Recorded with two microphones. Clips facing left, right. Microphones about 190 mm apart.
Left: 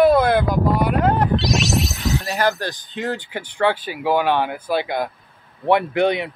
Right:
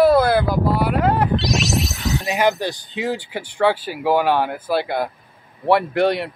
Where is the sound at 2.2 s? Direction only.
15° right (ahead or behind).